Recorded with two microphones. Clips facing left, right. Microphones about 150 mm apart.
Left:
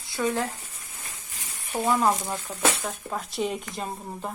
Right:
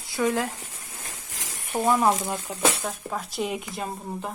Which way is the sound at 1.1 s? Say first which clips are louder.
Right 4 dB; 90° right.